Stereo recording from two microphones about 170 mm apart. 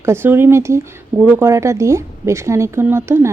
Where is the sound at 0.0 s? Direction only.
15° right (ahead or behind).